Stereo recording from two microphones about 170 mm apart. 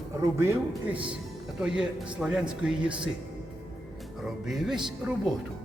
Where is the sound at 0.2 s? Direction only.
15° right (ahead or behind).